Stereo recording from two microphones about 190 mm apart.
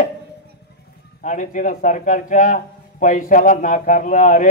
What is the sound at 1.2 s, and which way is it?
Speech, 40° left (ahead or behind).